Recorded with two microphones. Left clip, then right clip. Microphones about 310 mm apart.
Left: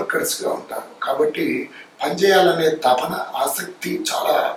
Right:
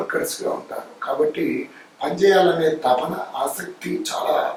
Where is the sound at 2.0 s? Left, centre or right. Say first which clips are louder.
Left 1 dB; centre.